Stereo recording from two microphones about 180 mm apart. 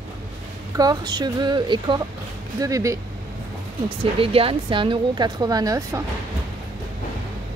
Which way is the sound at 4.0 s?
30° right (ahead or behind).